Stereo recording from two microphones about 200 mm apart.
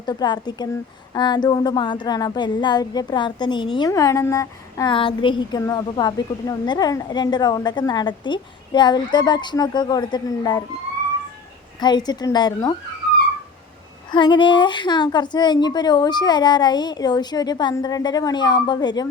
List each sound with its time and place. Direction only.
0.0 s speech: 20° left (ahead or behind)
11.8 s speech: 20° left (ahead or behind)
14.1 s speech: 25° left (ahead or behind)